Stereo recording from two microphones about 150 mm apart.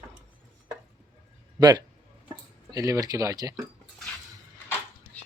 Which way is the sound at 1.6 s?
25° right (ahead or behind).